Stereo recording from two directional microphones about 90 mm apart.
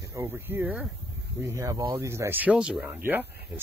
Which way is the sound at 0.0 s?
30° right (ahead or behind).